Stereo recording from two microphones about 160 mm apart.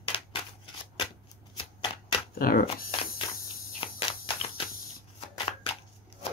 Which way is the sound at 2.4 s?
65° left (ahead or behind).